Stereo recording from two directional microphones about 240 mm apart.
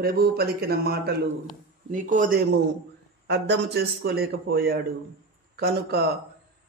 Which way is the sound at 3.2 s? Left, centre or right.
Right.